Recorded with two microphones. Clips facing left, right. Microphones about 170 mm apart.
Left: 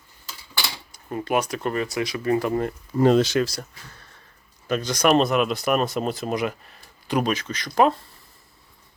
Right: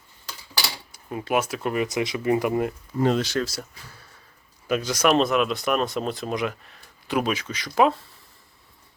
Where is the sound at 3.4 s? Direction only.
5° right (ahead or behind).